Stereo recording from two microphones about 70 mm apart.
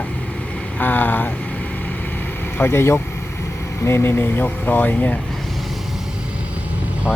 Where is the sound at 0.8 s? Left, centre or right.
Left.